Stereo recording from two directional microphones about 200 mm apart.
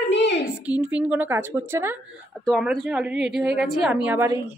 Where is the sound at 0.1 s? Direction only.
60° left (ahead or behind).